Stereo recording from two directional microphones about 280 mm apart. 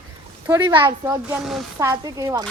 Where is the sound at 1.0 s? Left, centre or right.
Centre.